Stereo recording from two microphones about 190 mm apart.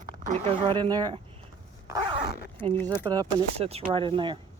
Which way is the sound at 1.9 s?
20° right (ahead or behind).